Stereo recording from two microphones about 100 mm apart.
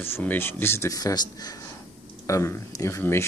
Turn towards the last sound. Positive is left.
turn(degrees=25)  # may be behind; listen again after turning